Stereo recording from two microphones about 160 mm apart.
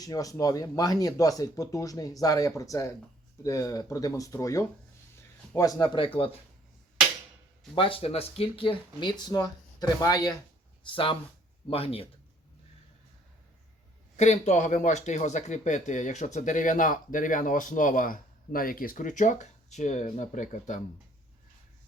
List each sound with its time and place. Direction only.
0.0 s speech: 20° left (ahead or behind)
7.8 s speech: 35° left (ahead or behind)
14.2 s speech: 45° left (ahead or behind)